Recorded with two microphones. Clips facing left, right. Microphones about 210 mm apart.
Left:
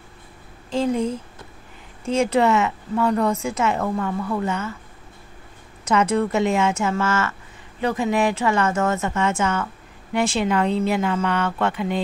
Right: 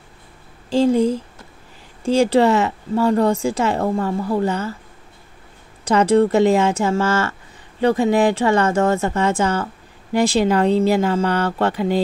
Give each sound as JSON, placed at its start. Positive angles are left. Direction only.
{"t": 0.7, "sound": "a woman's voice", "side_deg": -35}
{"t": 5.9, "sound": "a woman's voice", "side_deg": -35}